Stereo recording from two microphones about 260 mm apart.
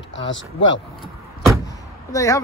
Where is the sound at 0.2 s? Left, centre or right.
Left.